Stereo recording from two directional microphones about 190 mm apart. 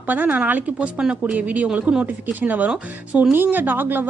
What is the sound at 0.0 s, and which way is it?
Speech, 10° right (ahead or behind).